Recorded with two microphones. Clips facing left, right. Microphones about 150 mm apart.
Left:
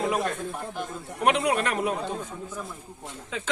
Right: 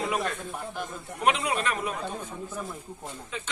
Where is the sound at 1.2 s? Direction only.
60° left (ahead or behind).